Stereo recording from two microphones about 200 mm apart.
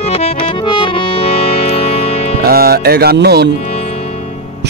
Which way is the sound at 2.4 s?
50° right (ahead or behind).